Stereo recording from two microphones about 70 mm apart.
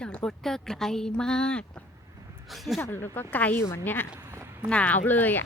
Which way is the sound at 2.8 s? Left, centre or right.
Left.